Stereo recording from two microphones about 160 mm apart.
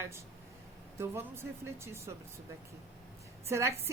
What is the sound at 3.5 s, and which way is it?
Speech, 15° right (ahead or behind).